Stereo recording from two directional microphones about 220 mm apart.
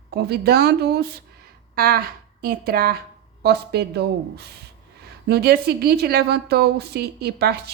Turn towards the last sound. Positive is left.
turn(degrees=-45)  # may be behind; listen again after turning